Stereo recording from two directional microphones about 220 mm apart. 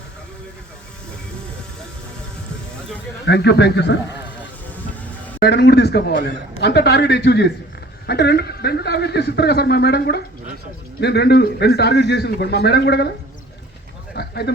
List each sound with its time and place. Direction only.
3.2 s a man's voice: 50° left (ahead or behind)
5.4 s a man's voice: 50° left (ahead or behind)
14.2 s a sound: 50° left (ahead or behind)